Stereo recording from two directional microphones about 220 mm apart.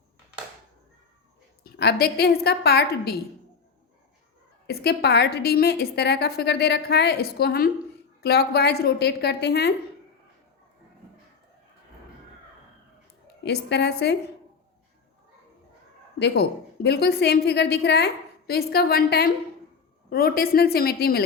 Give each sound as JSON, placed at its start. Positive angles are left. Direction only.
{"t": 1.6, "sound": "a woman's voice", "side_deg": 45}
{"t": 4.6, "sound": "a woman's voice", "side_deg": 45}
{"t": 13.2, "sound": "a woman's voice", "side_deg": 50}
{"t": 16.1, "sound": "a woman's voice", "side_deg": 50}